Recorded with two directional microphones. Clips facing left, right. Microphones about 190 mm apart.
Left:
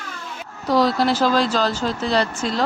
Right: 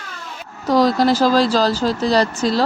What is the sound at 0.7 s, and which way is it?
Speech, 45° right (ahead or behind).